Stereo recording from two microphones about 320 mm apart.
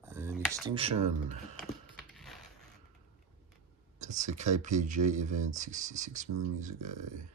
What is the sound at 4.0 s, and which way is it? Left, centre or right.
Speech, right.